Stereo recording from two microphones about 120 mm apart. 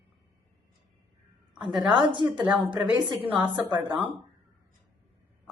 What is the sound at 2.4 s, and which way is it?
Speech, 10° right (ahead or behind).